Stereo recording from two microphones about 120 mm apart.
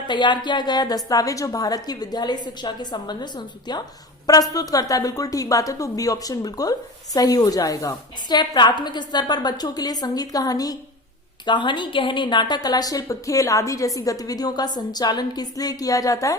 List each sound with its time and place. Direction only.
0.1 s a woman's voice: 40° left (ahead or behind)